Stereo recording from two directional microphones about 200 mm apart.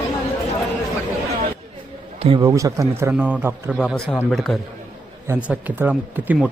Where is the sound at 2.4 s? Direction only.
15° right (ahead or behind).